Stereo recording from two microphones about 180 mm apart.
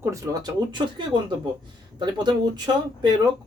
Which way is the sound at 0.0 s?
15° right (ahead or behind).